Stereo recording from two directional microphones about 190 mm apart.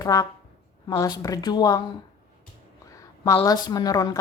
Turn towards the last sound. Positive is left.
turn(degrees=20)  # may be behind; listen again after turning